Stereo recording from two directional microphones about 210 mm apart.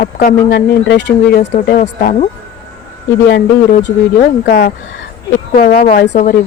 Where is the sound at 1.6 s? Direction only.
40° left (ahead or behind).